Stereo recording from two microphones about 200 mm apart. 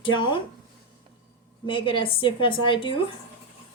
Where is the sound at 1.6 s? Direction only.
25° left (ahead or behind).